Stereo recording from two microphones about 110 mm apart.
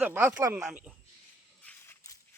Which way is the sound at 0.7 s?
10° right (ahead or behind).